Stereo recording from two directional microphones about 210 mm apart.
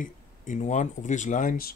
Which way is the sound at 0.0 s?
35° left (ahead or behind).